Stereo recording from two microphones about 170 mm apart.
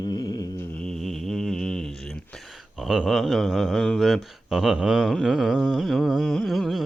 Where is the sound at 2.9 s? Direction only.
Centre (ahead or behind).